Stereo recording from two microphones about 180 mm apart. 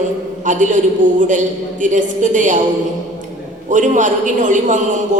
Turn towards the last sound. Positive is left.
turn(degrees=-45)  # may be behind; listen again after turning